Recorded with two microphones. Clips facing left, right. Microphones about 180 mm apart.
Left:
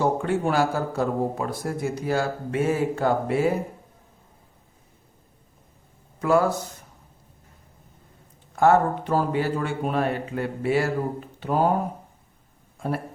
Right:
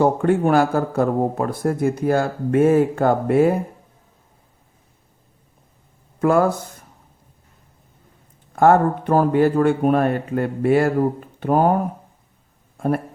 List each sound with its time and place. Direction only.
0.0 s speech: 55° right (ahead or behind)
6.1 s speech: 55° right (ahead or behind)
8.5 s speech: 55° right (ahead or behind)
12.7 s a sound: 55° right (ahead or behind)